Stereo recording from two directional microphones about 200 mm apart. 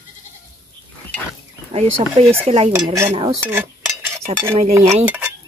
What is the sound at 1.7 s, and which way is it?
Speech, 30° right (ahead or behind).